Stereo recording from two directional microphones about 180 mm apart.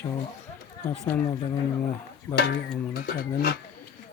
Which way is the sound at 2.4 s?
65° left (ahead or behind).